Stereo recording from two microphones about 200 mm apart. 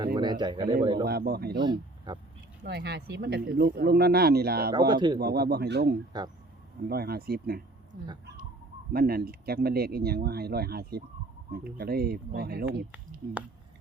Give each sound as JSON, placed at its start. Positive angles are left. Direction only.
{"t": 0.2, "sound": "a man's voice", "side_deg": -20}
{"t": 1.0, "sound": "speech", "side_deg": -50}
{"t": 1.5, "sound": "speech", "side_deg": -20}
{"t": 2.6, "sound": "speech", "side_deg": -55}
{"t": 4.9, "sound": "a man's voice", "side_deg": -20}
{"t": 5.2, "sound": "speech", "side_deg": -50}